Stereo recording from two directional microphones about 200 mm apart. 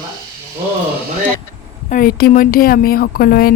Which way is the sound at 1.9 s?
45° left (ahead or behind).